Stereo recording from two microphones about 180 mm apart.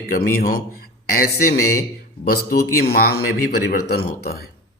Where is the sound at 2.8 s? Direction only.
60° left (ahead or behind).